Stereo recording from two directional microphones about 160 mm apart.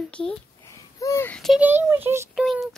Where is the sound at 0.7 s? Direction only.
20° left (ahead or behind).